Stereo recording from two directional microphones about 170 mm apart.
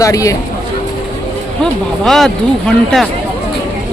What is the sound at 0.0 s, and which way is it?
Speech, 20° left (ahead or behind).